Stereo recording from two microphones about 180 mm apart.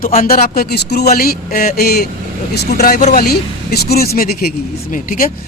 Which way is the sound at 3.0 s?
40° left (ahead or behind).